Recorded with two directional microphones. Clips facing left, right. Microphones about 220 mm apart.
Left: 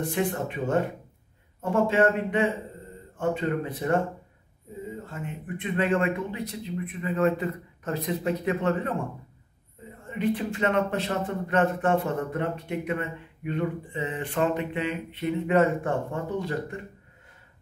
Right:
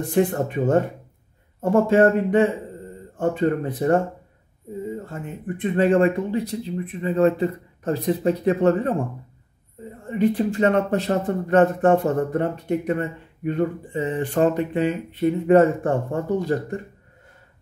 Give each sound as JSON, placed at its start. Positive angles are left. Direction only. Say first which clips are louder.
{"t": 0.1, "sound": "speech", "louder": "right 7 dB", "side_deg": -40}
{"t": 5.1, "sound": "speech", "louder": "right 4 dB", "side_deg": -40}
{"t": 10.0, "sound": "speech", "louder": "right 7 dB", "side_deg": -40}